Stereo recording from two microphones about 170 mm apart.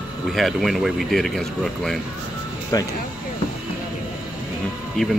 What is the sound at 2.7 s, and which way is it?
Speech, 20° left (ahead or behind).